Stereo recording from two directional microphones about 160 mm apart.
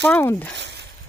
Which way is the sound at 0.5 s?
90° right.